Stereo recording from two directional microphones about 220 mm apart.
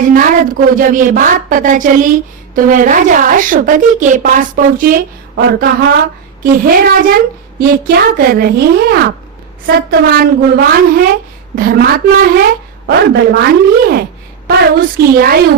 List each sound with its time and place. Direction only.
0.0 s a woman's voice: 40° right (ahead or behind)